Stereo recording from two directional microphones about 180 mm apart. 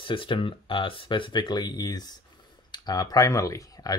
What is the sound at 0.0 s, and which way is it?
Speech, 30° left (ahead or behind).